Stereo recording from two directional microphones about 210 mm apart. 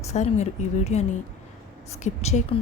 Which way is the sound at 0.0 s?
35° left (ahead or behind).